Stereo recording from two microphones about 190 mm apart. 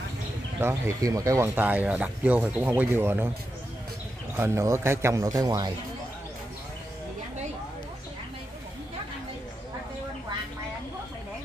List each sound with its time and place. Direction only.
0.6 s speech: 15° right (ahead or behind)
4.4 s speech: 15° right (ahead or behind)